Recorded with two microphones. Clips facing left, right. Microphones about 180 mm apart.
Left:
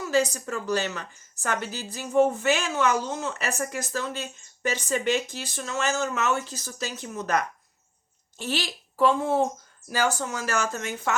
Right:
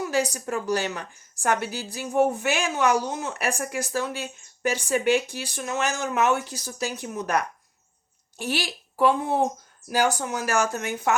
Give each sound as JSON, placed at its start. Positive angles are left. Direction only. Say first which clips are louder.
{"t": 0.1, "sound": "speech", "louder": "left 1 dB", "side_deg": -15}